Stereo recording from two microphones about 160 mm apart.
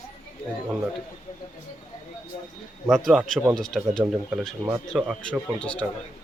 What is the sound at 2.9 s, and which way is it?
Speech, centre (ahead or behind).